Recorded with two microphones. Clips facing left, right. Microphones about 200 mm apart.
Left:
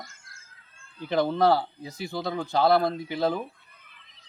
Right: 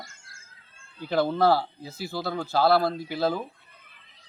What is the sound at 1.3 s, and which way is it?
Speech, 5° right (ahead or behind).